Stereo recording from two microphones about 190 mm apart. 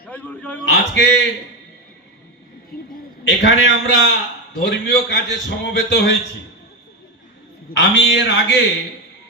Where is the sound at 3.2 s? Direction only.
70° left (ahead or behind).